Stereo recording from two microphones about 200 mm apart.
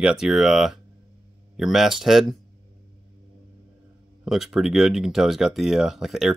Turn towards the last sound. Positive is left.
turn(degrees=0)  # may be behind; listen again after turning